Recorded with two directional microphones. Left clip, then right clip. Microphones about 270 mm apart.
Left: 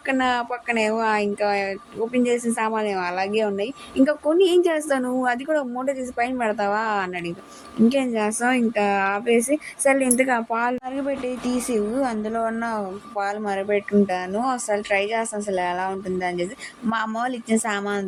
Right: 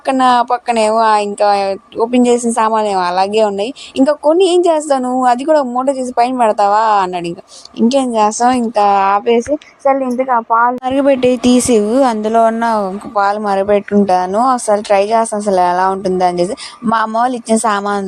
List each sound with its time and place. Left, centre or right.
0.0 s a woman's voice: right
9.8 s a woman's voice: centre
10.8 s speech: right